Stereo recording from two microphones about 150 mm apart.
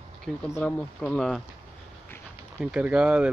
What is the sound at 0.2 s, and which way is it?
Speech, 5° left (ahead or behind).